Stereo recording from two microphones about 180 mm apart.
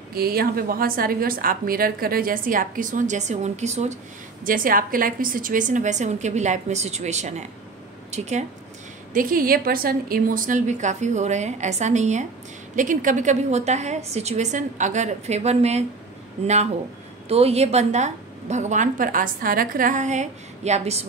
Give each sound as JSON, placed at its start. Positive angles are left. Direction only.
{"t": 0.1, "sound": "a woman's voice", "side_deg": -55}
{"t": 4.5, "sound": "a woman's voice", "side_deg": -50}
{"t": 9.1, "sound": "a woman's voice", "side_deg": -50}
{"t": 17.3, "sound": "a woman's voice", "side_deg": -35}